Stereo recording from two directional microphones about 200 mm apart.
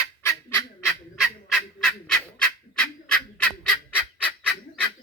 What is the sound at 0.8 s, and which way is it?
Fowl, centre (ahead or behind).